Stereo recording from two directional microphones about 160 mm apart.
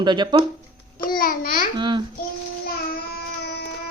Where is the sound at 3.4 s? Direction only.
90° left.